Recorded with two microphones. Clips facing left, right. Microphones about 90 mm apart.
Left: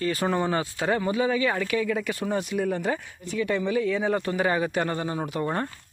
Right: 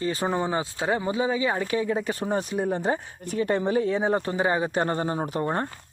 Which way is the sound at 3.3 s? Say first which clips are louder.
Right 2 dB; 40° right (ahead or behind).